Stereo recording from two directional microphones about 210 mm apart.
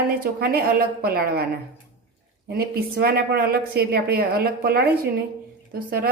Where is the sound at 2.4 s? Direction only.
50° right (ahead or behind).